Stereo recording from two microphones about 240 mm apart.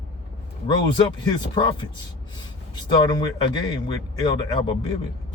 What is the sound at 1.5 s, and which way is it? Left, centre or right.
Speech, centre.